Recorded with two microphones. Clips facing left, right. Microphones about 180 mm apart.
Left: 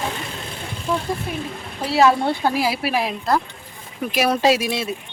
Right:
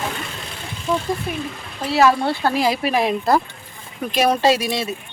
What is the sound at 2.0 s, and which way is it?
Speech, 20° left (ahead or behind).